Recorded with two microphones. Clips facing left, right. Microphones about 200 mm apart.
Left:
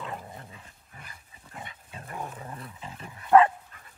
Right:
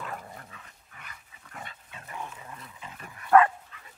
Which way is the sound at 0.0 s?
20° left (ahead or behind).